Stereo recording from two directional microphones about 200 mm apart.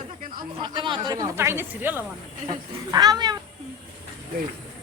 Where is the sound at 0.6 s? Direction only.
25° right (ahead or behind).